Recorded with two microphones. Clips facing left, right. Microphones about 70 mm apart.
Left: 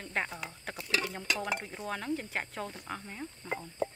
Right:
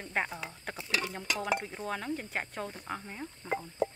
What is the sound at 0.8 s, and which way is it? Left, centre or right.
Speech, right.